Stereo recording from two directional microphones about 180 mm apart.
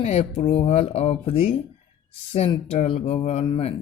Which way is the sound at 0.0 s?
35° left (ahead or behind).